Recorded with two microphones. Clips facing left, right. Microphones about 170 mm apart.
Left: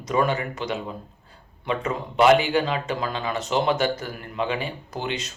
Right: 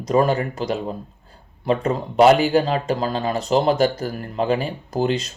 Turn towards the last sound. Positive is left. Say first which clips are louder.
# right 8 dB
turn(degrees=-40)  # may be behind; listen again after turning